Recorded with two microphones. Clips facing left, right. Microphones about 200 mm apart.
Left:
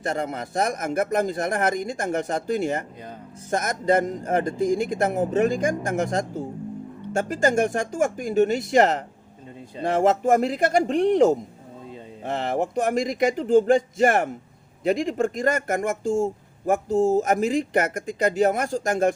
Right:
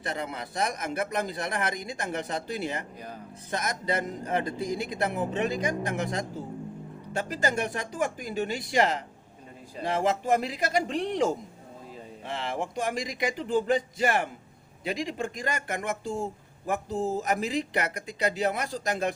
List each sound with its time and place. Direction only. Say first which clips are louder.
0.0 s speech: left 6 dB; 45° left (ahead or behind)